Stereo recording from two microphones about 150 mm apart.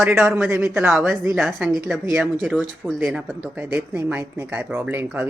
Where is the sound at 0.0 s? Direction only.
15° right (ahead or behind).